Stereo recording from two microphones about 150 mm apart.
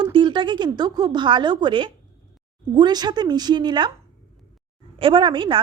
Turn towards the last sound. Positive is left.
turn(degrees=-35)  # may be behind; listen again after turning